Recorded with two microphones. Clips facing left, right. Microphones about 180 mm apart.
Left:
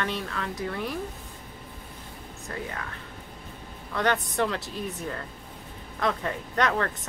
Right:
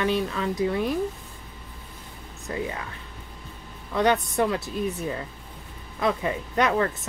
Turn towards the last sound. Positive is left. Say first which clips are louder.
# right 3 dB
turn(degrees=-10)  # may be behind; listen again after turning